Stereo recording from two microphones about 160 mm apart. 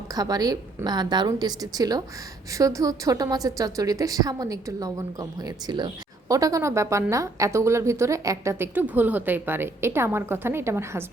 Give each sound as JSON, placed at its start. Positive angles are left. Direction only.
{"t": 0.1, "sound": "a woman's voice", "side_deg": -25}